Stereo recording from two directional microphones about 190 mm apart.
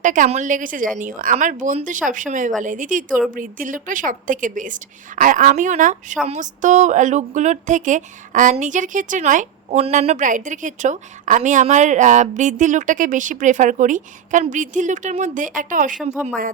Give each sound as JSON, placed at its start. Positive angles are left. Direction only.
{"t": 0.0, "sound": "a woman's voice", "side_deg": -40}